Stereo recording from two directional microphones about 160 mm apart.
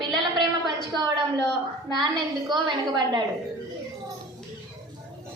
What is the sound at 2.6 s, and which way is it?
Child singing, 30° right (ahead or behind).